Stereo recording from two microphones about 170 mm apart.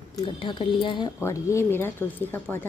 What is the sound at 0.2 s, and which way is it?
Speech, 30° left (ahead or behind).